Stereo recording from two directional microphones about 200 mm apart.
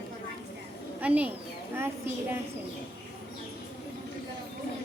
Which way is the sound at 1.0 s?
10° right (ahead or behind).